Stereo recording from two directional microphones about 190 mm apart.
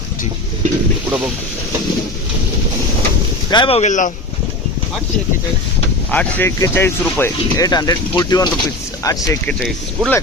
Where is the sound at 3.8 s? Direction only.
40° left (ahead or behind).